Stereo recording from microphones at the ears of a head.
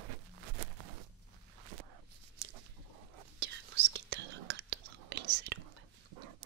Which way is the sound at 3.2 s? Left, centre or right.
Right.